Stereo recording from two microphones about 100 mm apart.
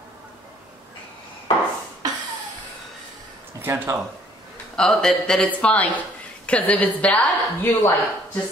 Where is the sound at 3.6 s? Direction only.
20° right (ahead or behind).